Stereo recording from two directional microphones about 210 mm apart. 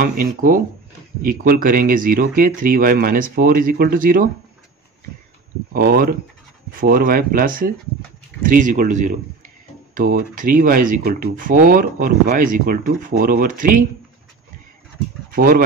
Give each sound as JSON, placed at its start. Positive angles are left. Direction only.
{"t": 0.0, "sound": "speech", "side_deg": -40}
{"t": 5.7, "sound": "speech", "side_deg": -45}
{"t": 15.3, "sound": "speech", "side_deg": -40}